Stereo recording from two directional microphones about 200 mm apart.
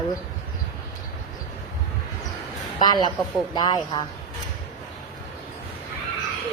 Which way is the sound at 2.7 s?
20° left (ahead or behind).